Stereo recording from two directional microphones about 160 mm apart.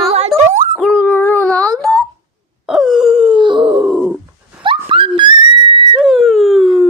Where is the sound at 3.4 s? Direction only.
30° right (ahead or behind).